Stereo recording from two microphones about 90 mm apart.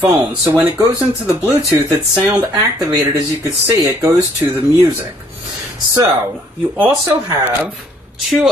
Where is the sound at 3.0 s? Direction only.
40° right (ahead or behind).